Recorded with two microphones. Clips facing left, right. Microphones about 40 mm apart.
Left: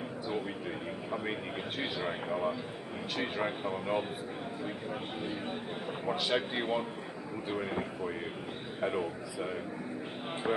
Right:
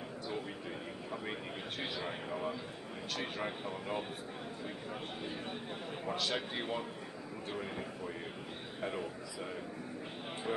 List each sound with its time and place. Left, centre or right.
1.8 s speech: centre
6.0 s speech: centre